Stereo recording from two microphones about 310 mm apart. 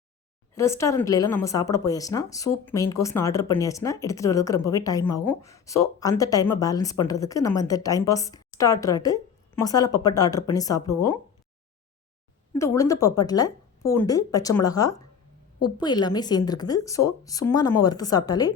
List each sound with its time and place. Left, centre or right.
0.5 s a woman's voice: centre
12.5 s a woman's voice: centre